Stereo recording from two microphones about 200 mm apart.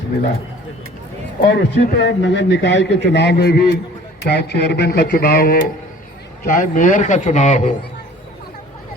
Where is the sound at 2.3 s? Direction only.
60° left (ahead or behind); by 7.7 s 35° left (ahead or behind).